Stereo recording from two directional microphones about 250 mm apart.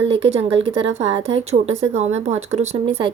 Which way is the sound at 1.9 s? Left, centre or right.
Right.